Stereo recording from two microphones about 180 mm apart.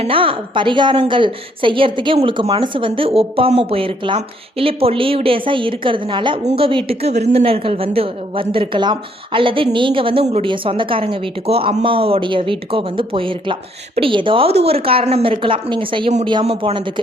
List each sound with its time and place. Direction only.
0.0 s a woman's voice: 30° right (ahead or behind)